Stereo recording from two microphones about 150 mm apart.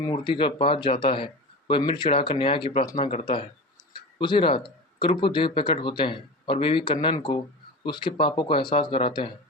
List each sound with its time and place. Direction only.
0.0 s speech: 30° left (ahead or behind)
3.0 s speech: 45° left (ahead or behind)
4.2 s speech: 35° left (ahead or behind)